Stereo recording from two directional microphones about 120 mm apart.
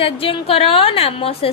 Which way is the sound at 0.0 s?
50° left (ahead or behind).